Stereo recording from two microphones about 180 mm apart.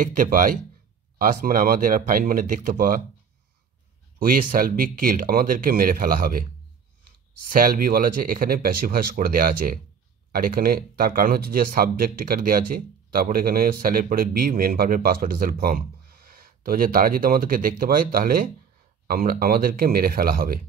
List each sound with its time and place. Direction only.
0.0 s speech: 45° right (ahead or behind)
4.2 s speech: 50° right (ahead or behind)